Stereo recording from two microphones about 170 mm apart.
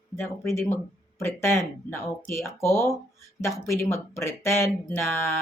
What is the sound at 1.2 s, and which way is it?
Speech, 15° left (ahead or behind).